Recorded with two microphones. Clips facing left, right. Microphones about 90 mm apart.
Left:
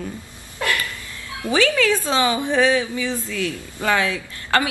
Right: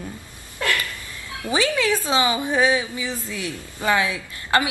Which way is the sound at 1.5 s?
20° right (ahead or behind).